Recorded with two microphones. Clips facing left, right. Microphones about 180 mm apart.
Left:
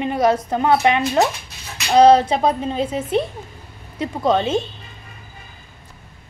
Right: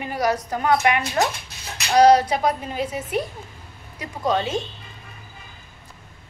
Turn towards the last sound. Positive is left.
turn(degrees=25)  # may be behind; listen again after turning